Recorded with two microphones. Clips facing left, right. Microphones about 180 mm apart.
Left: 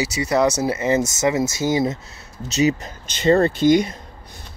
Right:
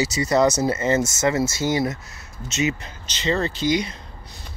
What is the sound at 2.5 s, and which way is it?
Speech, 35° left (ahead or behind).